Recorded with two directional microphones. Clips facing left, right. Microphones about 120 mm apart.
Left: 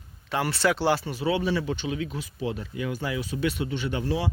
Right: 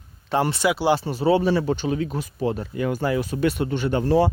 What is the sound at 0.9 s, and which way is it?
Speech, 35° right (ahead or behind).